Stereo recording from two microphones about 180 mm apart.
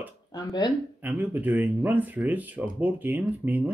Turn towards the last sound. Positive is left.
turn(degrees=-10)  # may be behind; listen again after turning